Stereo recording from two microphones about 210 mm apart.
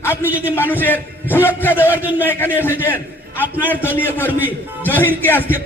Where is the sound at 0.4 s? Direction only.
10° left (ahead or behind).